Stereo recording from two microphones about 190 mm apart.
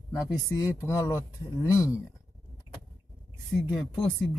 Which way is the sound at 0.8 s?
15° left (ahead or behind).